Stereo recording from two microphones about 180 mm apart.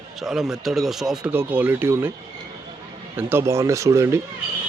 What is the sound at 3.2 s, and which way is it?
Speech, 15° right (ahead or behind).